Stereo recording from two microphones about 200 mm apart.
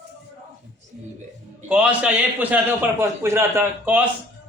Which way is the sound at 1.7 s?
5° right (ahead or behind).